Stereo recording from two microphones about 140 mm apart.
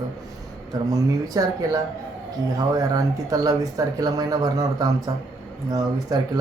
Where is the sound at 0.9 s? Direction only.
25° right (ahead or behind).